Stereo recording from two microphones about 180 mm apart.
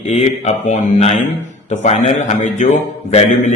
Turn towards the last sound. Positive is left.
turn(degrees=40)  # may be behind; listen again after turning